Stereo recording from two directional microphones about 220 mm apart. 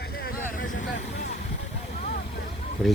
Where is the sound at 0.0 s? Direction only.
45° left (ahead or behind).